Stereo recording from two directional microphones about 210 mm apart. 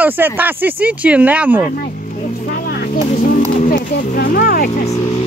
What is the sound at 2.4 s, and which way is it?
Music, 45° left (ahead or behind).